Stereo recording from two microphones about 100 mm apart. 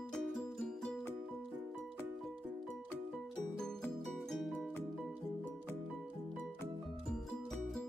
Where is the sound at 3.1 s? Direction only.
5° left (ahead or behind).